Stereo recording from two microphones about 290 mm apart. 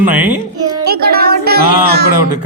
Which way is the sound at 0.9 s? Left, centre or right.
Right.